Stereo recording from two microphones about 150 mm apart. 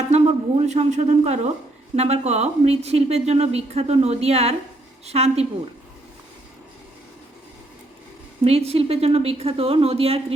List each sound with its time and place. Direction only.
0.1 s a sound: 45° right (ahead or behind)
2.0 s a woman's voice: 45° right (ahead or behind)
8.4 s a woman's voice: 40° right (ahead or behind)